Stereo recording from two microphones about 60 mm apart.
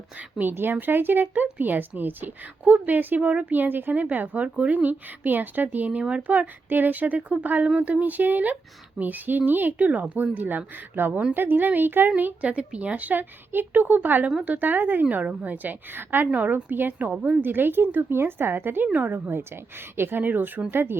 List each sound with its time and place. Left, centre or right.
0.2 s speech: right
12.4 s speech: centre; by 18.9 s right
18.9 s speech: right